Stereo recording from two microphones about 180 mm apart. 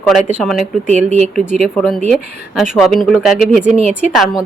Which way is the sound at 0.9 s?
40° right (ahead or behind).